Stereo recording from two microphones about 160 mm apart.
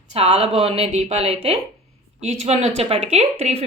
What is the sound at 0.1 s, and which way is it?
Speech, 40° right (ahead or behind).